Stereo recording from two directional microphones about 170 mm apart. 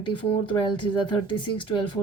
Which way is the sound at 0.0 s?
30° left (ahead or behind).